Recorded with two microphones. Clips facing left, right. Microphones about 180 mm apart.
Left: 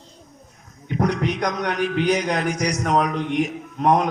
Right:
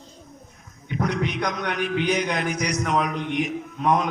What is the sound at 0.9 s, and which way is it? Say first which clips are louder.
A man's voice: left 3 dB; 40° left (ahead or behind).